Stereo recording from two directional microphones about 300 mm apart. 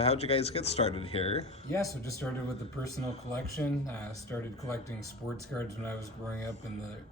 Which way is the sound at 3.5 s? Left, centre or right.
Centre.